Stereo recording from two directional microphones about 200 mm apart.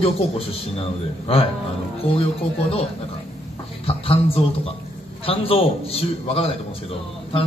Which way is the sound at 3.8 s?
30° left (ahead or behind).